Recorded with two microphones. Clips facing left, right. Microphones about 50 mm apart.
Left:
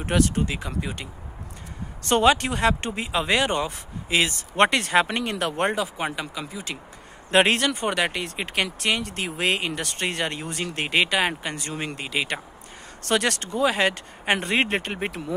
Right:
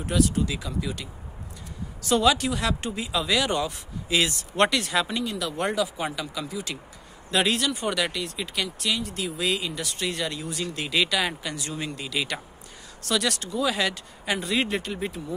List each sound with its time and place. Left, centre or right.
0.0 s speech: left
2.0 s speech: left
5.7 s speech: left
7.2 s speech: left
13.0 s speech: left